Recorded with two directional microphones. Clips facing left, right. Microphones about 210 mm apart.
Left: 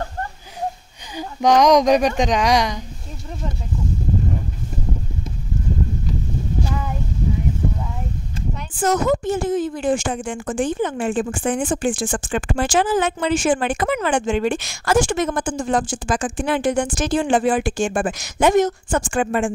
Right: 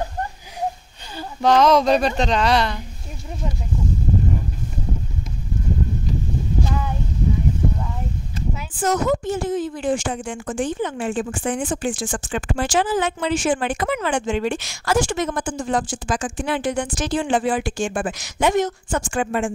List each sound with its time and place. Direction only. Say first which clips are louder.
1.1 s speech: left 1 dB; 15° left (ahead or behind)
8.7 s speech: left 2 dB; 50° left (ahead or behind)